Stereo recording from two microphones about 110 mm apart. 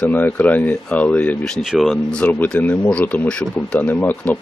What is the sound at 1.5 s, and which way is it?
Speech, centre (ahead or behind).